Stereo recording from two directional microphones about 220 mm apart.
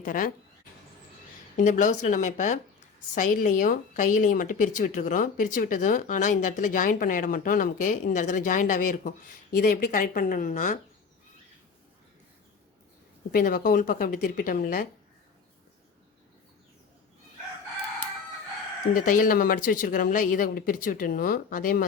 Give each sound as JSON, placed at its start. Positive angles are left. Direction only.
{"t": 0.0, "sound": "speech", "side_deg": 40}
{"t": 1.5, "sound": "speech", "side_deg": 35}
{"t": 13.3, "sound": "speech", "side_deg": 40}
{"t": 18.9, "sound": "speech", "side_deg": 35}